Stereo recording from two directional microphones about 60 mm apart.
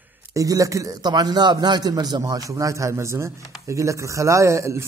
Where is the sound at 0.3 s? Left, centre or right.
Right.